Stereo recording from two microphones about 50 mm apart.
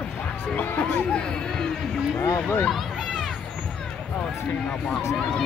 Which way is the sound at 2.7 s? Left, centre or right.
Centre.